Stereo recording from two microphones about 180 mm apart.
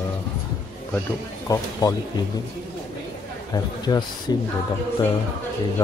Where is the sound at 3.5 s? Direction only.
20° left (ahead or behind).